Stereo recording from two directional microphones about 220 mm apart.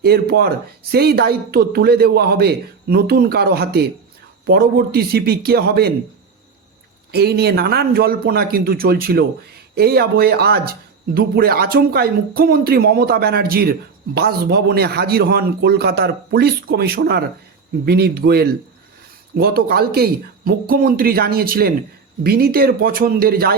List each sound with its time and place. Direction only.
0.0 s speech: 45° right (ahead or behind)
7.1 s speech: 45° right (ahead or behind)